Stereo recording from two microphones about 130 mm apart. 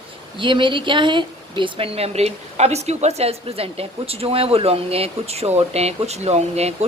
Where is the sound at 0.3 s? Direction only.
40° right (ahead or behind).